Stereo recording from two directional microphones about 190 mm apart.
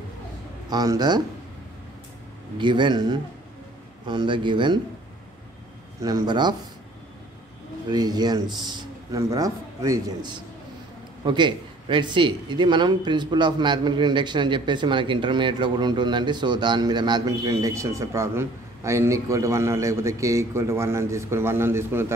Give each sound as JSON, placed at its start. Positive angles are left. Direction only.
{"t": 0.7, "sound": "speech", "side_deg": -20}
{"t": 2.5, "sound": "speech", "side_deg": -25}
{"t": 5.9, "sound": "speech", "side_deg": -20}
{"t": 7.9, "sound": "speech", "side_deg": -20}